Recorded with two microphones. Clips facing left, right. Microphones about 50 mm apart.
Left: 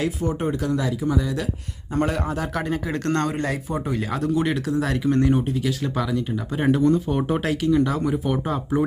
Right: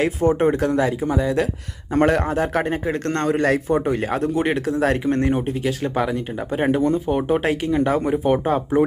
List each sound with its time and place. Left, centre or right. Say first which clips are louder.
0.0 s speech: right 7 dB; right
1.9 s speech: right 6 dB; right
2.3 s speech: right 5 dB; right
3.2 s speech: right 7 dB; right
3.8 s speech: right 3 dB; right
6.7 s speech: left 1 dB; centre
7.4 s speech: right 1 dB; right